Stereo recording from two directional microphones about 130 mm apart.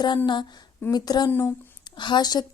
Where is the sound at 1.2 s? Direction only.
15° left (ahead or behind).